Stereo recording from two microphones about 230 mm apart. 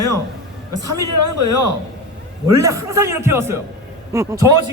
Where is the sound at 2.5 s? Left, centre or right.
Centre.